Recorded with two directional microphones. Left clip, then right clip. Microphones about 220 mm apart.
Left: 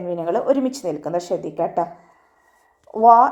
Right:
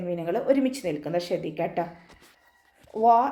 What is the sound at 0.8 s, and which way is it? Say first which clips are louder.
Speech: left 5 dB; 45° left (ahead or behind).